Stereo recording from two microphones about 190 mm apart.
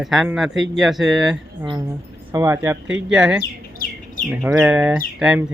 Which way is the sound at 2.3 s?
15° right (ahead or behind).